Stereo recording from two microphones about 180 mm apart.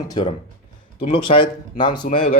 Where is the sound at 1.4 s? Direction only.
25° left (ahead or behind).